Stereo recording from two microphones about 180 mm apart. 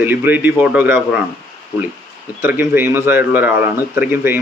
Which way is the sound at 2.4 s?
10° right (ahead or behind).